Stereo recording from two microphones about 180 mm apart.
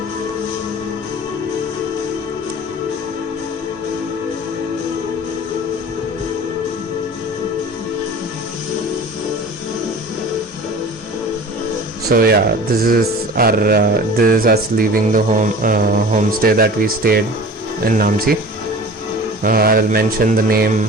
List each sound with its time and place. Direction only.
12.0 s speech: 60° right (ahead or behind)
19.4 s speech: 55° right (ahead or behind)